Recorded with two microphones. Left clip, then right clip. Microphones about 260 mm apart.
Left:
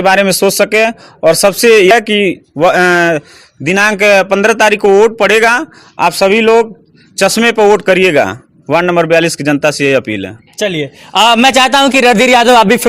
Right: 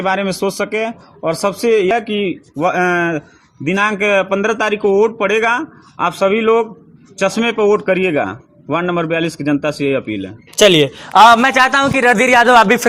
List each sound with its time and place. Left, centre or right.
0.0 s a man's voice: left
10.6 s speech: centre
11.0 s a man's voice: centre
11.3 s a man's voice: left